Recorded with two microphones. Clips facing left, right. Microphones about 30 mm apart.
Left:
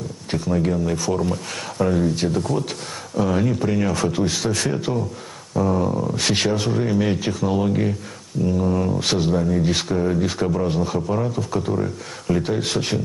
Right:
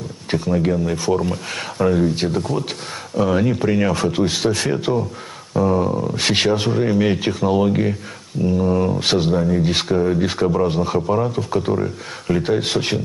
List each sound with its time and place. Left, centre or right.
0.6 s speech: centre
5.6 s speech: centre
6.1 s speech: right
6.7 s speech: centre
11.3 s speech: right
11.7 s speech: centre